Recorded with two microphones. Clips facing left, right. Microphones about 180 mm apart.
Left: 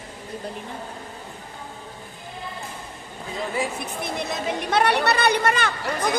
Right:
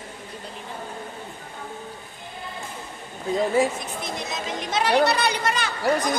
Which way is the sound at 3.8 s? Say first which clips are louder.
Left 2 dB; 60° left (ahead or behind).